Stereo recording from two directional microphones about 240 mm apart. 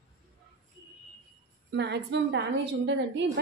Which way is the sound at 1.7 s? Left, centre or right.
Right.